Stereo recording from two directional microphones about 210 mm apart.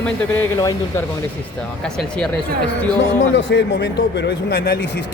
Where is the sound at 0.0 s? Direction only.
10° left (ahead or behind).